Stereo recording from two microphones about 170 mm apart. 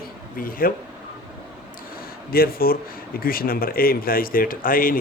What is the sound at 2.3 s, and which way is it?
Speech, 60° left (ahead or behind).